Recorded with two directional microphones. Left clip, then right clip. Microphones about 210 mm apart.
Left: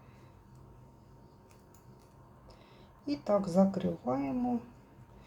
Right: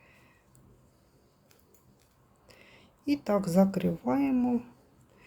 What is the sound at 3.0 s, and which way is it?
A woman's voice, 30° right (ahead or behind).